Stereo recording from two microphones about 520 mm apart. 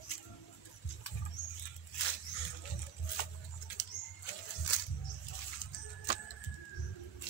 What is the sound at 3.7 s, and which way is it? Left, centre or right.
Bird flight, left.